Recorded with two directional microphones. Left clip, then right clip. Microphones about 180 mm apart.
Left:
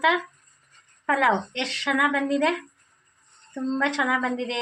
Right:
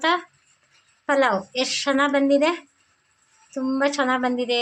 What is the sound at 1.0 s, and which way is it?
A woman's voice, 40° right (ahead or behind).